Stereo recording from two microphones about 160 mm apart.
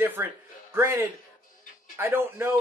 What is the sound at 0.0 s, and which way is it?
Speech, 10° right (ahead or behind).